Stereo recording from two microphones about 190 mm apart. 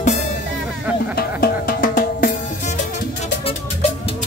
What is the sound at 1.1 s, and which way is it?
Music, 55° left (ahead or behind).